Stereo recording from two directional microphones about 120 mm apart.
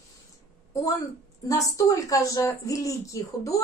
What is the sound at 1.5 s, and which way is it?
Speech, 30° left (ahead or behind).